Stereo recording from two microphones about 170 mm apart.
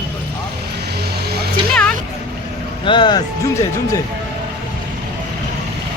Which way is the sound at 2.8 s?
30° left (ahead or behind).